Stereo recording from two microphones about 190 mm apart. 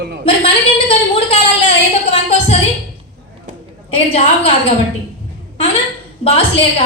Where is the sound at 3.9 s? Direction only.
30° left (ahead or behind).